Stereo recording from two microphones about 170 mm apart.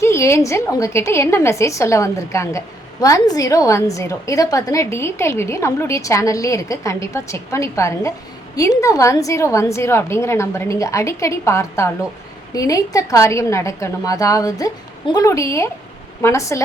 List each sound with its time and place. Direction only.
0.0 s a woman's voice: 15° left (ahead or behind)